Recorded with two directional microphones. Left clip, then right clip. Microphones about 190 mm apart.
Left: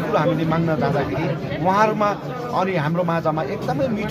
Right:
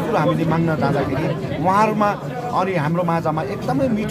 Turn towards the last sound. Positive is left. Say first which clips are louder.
# right 1 dB
turn(degrees=-10)  # may be behind; listen again after turning